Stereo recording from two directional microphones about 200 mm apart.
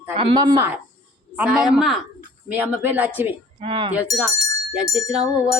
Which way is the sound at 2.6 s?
10° right (ahead or behind).